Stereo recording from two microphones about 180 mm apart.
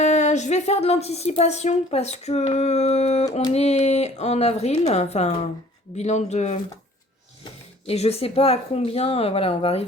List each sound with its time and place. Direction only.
0.0 s speech: 40° left (ahead or behind)
7.9 s speech: 35° left (ahead or behind)